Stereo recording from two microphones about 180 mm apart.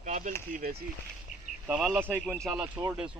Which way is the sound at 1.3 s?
40° left (ahead or behind).